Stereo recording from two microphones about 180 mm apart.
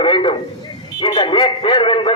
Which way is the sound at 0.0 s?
25° left (ahead or behind).